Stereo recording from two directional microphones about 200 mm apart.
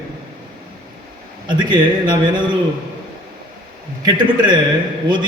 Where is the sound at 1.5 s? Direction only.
20° right (ahead or behind).